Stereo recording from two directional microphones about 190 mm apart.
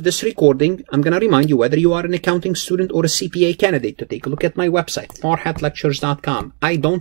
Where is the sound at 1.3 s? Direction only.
35° right (ahead or behind).